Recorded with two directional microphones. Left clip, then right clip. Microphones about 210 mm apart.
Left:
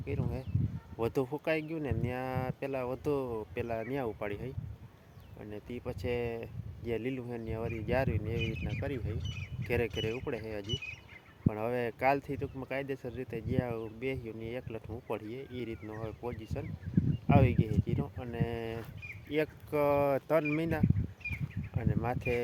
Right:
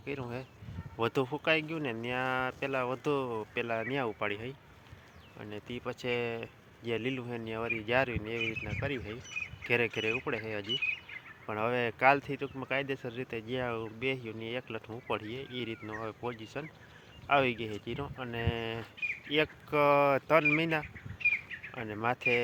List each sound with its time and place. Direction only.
0.0 s speech: 5° right (ahead or behind)
20.8 s a sound: 45° left (ahead or behind)
21.8 s speech: centre (ahead or behind)